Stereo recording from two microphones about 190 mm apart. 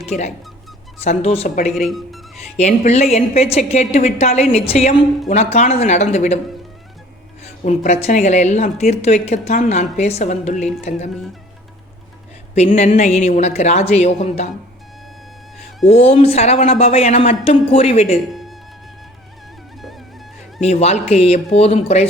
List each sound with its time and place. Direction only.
0.0 s a woman's voice: 35° left (ahead or behind)
1.7 s speech: centre (ahead or behind)
2.6 s a woman's voice: 35° left (ahead or behind)
7.4 s a woman's voice: 35° left (ahead or behind)
12.5 s a woman's voice: 35° left (ahead or behind)
15.9 s a woman's voice: 30° left (ahead or behind)
18.3 s music: centre (ahead or behind)
20.6 s a woman's voice: 35° left (ahead or behind)